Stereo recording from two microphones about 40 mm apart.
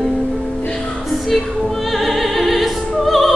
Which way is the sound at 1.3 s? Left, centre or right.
Centre.